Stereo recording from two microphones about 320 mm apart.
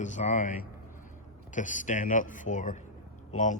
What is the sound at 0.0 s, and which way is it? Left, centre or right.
A man's voice, left.